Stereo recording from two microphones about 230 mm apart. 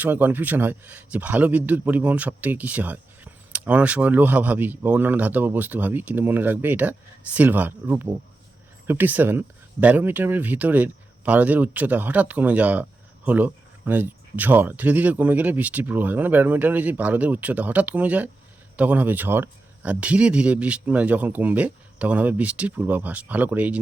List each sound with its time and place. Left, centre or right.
0.0 s speech: centre